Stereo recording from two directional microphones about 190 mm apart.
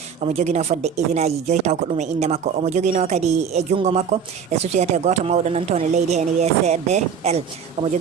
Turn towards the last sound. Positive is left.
turn(degrees=-35)  # may be behind; listen again after turning